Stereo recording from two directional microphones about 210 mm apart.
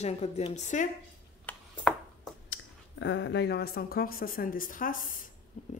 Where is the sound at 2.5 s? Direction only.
60° left (ahead or behind); by 5.1 s 40° left (ahead or behind).